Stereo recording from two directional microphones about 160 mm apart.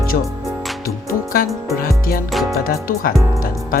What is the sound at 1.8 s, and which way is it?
Speech, 65° left (ahead or behind).